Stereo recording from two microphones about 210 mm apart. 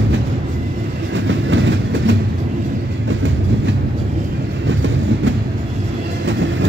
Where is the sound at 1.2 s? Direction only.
60° right (ahead or behind).